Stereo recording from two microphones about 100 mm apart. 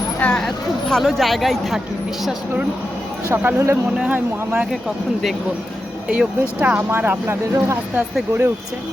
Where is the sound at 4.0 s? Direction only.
15° right (ahead or behind).